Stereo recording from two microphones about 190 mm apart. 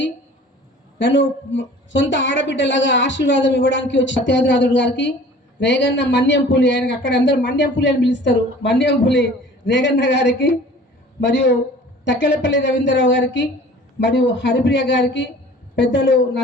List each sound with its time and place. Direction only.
0.9 s a woman's voice: 75° left (ahead or behind)